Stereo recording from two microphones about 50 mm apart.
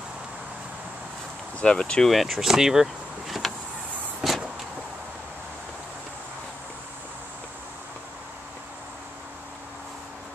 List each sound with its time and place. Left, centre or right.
1.6 s speech: centre
2.0 s speech: centre
4.2 s vehicle: centre